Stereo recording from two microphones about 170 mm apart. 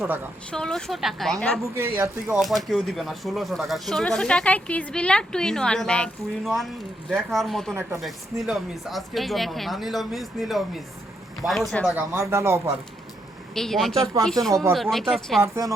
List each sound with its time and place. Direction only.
0.0 s speech: centre (ahead or behind)
11.9 s speech: 15° right (ahead or behind)
13.5 s speech: centre (ahead or behind)
15.4 s speech: 20° right (ahead or behind)